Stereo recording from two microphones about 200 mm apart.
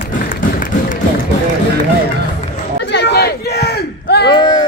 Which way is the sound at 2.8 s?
60° left (ahead or behind).